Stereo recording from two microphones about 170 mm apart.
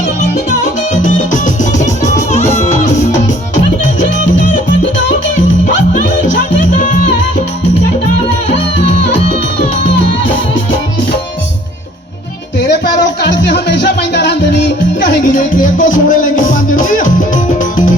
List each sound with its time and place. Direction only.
0.6 s music: 50° left (ahead or behind)
2.5 s music: 40° left (ahead or behind)
13.2 s music: 80° left
15.4 s music: 50° left (ahead or behind)